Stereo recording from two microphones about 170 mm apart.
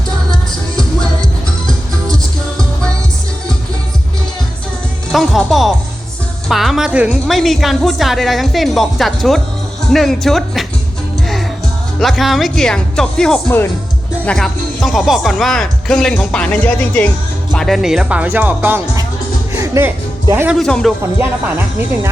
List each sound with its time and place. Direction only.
0.8 s music: 5° left (ahead or behind)
5.1 s speech: centre (ahead or behind)
11.9 s speech: centre (ahead or behind)
19.5 s music: 15° right (ahead or behind)
20.3 s speech: 10° right (ahead or behind)
20.6 s speech: 5° left (ahead or behind)